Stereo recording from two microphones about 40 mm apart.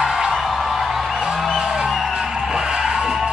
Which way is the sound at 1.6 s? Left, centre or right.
Centre.